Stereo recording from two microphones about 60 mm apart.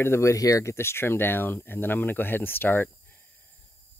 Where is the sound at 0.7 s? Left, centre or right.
Left.